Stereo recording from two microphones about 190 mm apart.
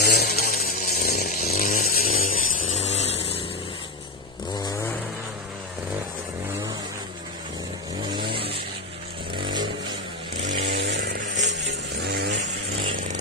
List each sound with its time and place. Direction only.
0.0 s a sound: 60° left (ahead or behind)
0.6 s chainsaw: 50° left (ahead or behind)
1.5 s chainsaw: 35° left (ahead or behind)
1.8 s chainsaw: 50° left (ahead or behind); by 3.3 s 35° left (ahead or behind)
8.1 s vehicle: 25° right (ahead or behind)
10.6 s vehicle: 60° right (ahead or behind)
11.3 s music: 70° right (ahead or behind)